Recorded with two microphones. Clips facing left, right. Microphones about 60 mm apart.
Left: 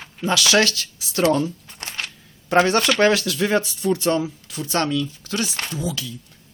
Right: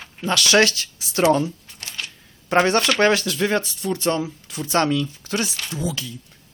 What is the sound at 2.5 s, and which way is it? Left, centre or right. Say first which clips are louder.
Speech: left 1 dB; centre.